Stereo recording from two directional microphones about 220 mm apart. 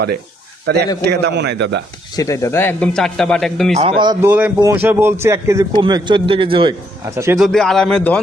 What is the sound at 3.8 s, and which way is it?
A man's voice, 25° right (ahead or behind).